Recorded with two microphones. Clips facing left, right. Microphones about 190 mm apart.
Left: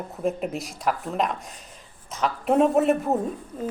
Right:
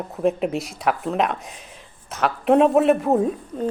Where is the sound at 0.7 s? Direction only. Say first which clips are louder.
Right 2 dB; 75° right (ahead or behind).